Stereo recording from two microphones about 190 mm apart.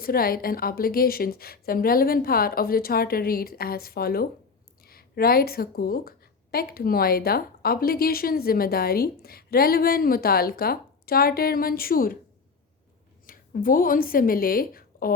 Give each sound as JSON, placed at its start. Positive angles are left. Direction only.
{"t": 0.0, "sound": "a woman's voice", "side_deg": 50}
{"t": 13.2, "sound": "a woman's voice", "side_deg": 50}